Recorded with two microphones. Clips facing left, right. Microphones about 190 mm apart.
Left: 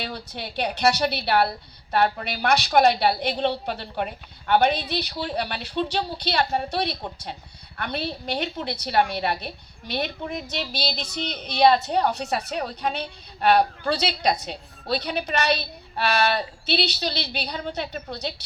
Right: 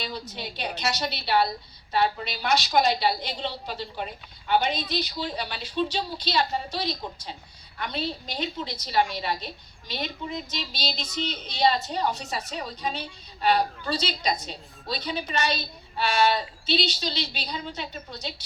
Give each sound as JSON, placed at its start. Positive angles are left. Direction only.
{"t": 0.0, "sound": "a woman's voice", "side_deg": 65}